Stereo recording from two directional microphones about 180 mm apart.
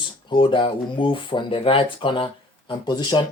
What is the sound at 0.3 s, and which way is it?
Speech, 25° left (ahead or behind).